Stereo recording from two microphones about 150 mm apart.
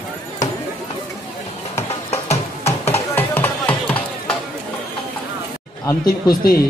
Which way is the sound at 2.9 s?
15° left (ahead or behind).